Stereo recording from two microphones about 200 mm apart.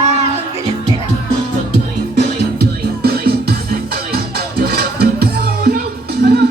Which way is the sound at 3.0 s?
50° right (ahead or behind).